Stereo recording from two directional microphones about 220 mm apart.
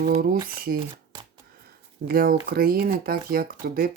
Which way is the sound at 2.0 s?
40° right (ahead or behind).